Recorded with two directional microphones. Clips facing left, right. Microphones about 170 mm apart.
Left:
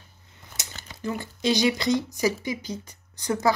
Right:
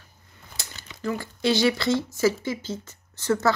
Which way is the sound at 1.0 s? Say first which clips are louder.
Right 1 dB; 20° left (ahead or behind).